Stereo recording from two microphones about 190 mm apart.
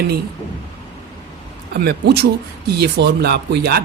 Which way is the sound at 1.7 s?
55° right (ahead or behind).